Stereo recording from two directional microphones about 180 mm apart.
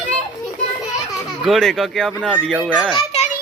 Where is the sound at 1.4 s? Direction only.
Centre (ahead or behind).